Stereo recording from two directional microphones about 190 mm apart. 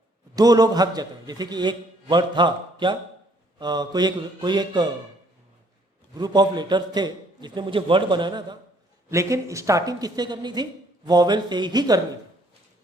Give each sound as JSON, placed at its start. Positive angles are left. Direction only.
{"t": 0.3, "sound": "speech", "side_deg": -20}
{"t": 6.1, "sound": "speech", "side_deg": -20}